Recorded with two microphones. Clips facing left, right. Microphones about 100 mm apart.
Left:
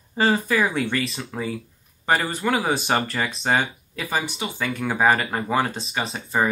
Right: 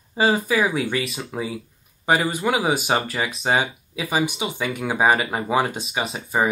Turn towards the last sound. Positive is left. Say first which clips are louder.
# right 1 dB
turn(degrees=-10)  # may be behind; listen again after turning